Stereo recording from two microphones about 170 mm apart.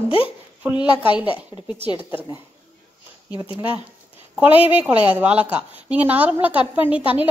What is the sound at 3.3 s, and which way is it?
Speech, 30° left (ahead or behind).